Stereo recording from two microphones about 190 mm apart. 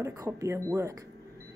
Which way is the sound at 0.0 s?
15° right (ahead or behind).